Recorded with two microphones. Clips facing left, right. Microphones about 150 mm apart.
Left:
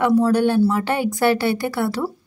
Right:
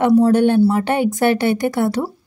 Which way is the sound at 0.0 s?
20° right (ahead or behind).